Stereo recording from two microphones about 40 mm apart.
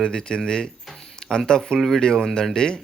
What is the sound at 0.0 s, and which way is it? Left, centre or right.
A man's voice, centre.